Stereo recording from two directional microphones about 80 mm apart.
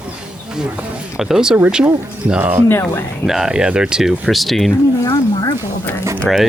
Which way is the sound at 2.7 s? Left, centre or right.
Left.